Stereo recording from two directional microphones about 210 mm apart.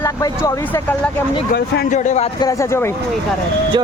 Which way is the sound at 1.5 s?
40° left (ahead or behind).